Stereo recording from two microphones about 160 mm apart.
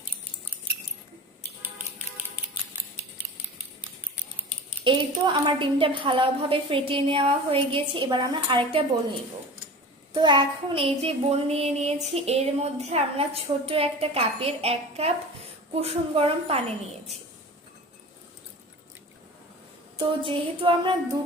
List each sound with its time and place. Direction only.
4.8 s a woman's voice: 30° right (ahead or behind)
10.2 s a woman's voice: 30° right (ahead or behind)
20.0 s a woman's voice: 30° right (ahead or behind)